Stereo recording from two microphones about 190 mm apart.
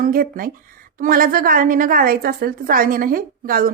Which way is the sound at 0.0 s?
50° right (ahead or behind).